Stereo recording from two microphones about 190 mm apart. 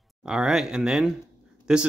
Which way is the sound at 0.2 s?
5° right (ahead or behind).